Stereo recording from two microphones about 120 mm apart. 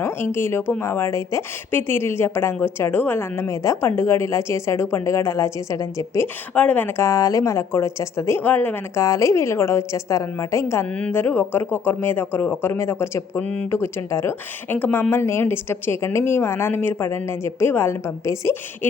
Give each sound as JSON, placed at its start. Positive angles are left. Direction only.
{"t": 0.0, "sound": "a woman's voice", "side_deg": 20}
{"t": 6.5, "sound": "a woman's voice", "side_deg": 10}
{"t": 13.4, "sound": "speech", "side_deg": 10}
{"t": 13.7, "sound": "a woman's voice", "side_deg": 25}